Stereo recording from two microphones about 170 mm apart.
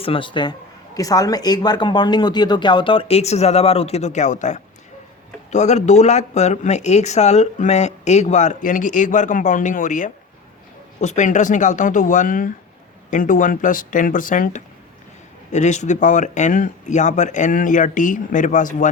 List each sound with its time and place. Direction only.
0.0 s speech: 30° left (ahead or behind); by 18.9 s 45° left (ahead or behind)